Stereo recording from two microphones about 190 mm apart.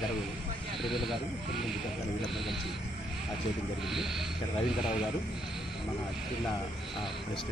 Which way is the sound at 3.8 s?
Centre (ahead or behind).